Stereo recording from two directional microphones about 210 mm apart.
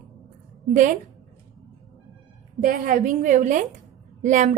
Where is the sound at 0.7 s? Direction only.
35° right (ahead or behind).